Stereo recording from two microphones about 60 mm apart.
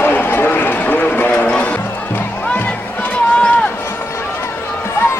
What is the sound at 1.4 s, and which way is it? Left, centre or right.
Music, left.